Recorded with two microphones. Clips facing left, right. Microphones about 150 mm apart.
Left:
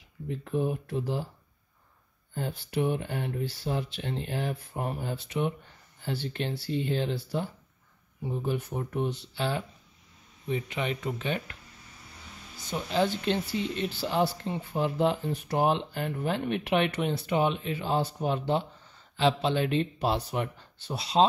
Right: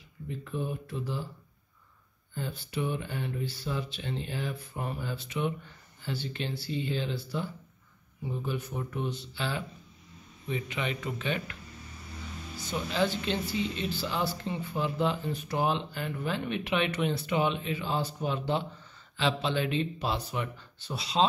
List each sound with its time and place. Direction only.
0.4 s speech: 70° left (ahead or behind)
2.3 s speech: 65° left (ahead or behind)
8.5 s speech: 50° left (ahead or behind)
12.6 s speech: 50° left (ahead or behind)